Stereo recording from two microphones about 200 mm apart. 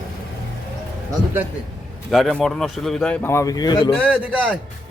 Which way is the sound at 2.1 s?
Centre (ahead or behind).